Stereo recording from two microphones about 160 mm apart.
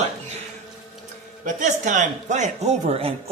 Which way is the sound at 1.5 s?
50° right (ahead or behind).